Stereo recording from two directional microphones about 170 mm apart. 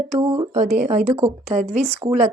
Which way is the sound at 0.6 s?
50° right (ahead or behind).